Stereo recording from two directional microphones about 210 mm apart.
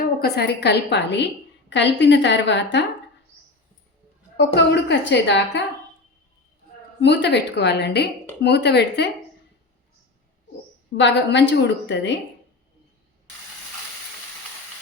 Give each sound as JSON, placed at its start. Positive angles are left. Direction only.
{"t": 0.0, "sound": "a woman's voice", "side_deg": 50}
{"t": 4.4, "sound": "a woman's voice", "side_deg": 55}
{"t": 7.0, "sound": "a woman's voice", "side_deg": 55}
{"t": 10.9, "sound": "a woman's voice", "side_deg": 55}